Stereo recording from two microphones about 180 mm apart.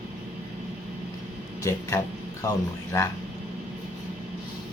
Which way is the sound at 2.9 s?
15° left (ahead or behind).